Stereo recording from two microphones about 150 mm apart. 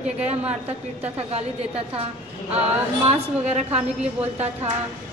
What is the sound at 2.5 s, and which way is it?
Speech, 45° right (ahead or behind).